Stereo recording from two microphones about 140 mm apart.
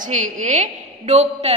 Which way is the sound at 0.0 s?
60° right (ahead or behind).